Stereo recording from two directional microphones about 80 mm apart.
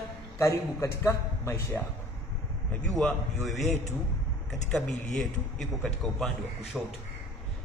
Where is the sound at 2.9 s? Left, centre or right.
Centre.